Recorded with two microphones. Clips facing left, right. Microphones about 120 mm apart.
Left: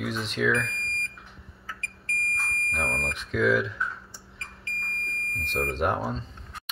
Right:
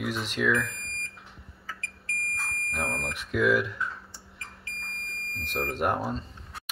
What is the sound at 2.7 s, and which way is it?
Speech, 5° right (ahead or behind).